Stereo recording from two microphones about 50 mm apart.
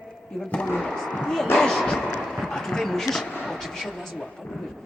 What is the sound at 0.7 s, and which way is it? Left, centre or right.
Speech, centre.